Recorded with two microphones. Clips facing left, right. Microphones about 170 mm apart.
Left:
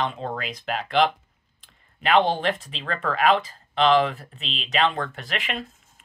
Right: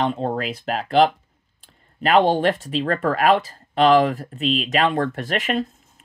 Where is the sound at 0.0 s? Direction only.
35° right (ahead or behind).